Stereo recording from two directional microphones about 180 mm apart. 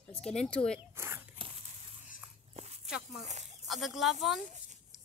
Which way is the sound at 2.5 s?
40° right (ahead or behind).